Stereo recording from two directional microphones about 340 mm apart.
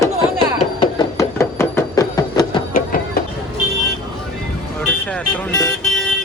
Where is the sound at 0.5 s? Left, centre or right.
Centre.